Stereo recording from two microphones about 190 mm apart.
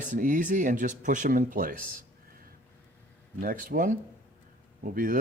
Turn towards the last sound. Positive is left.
turn(degrees=-45)  # may be behind; listen again after turning